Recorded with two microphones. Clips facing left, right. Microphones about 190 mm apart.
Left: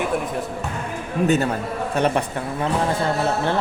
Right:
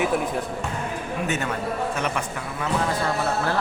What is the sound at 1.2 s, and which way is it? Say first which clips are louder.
A man's voice: left 8 dB; 35° left (ahead or behind).